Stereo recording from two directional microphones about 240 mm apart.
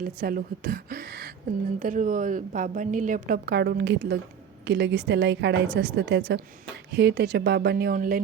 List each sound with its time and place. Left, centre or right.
0.0 s a woman's voice: right